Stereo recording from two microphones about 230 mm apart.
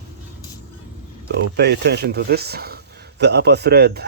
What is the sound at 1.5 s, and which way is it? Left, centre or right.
Speech, right.